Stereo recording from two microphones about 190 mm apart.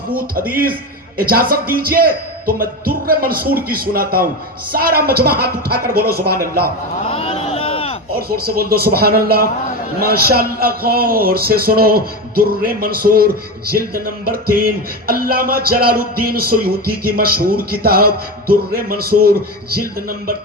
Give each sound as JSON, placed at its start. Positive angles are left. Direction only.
{"t": 0.5, "sound": "a man's voice", "side_deg": -50}
{"t": 7.1, "sound": "a sound", "side_deg": 30}
{"t": 8.3, "sound": "a man's voice", "side_deg": -55}